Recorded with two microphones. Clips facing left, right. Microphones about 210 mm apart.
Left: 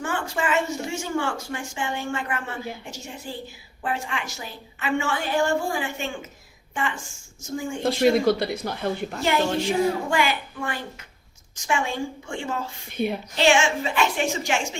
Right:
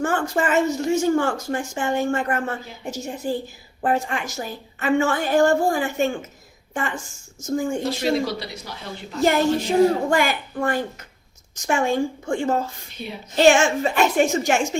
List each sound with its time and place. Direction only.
0.0 s a woman's voice: 45° right (ahead or behind)
7.9 s speech: 55° left (ahead or behind)
9.2 s a woman's voice: 40° right (ahead or behind)
12.9 s speech: 55° left (ahead or behind)
13.3 s a woman's voice: 45° right (ahead or behind)